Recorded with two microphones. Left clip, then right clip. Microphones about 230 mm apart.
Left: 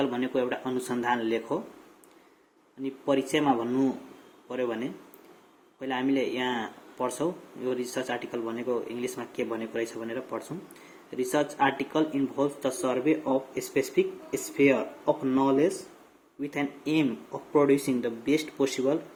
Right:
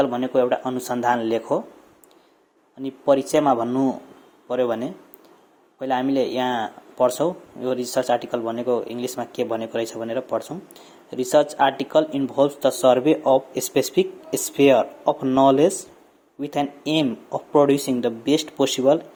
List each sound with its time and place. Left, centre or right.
0.0 s speech: right
2.8 s speech: right
5.8 s speech: right